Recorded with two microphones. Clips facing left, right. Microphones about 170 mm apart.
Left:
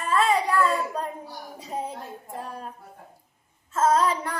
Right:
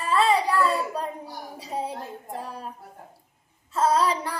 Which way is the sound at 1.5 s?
30° right (ahead or behind).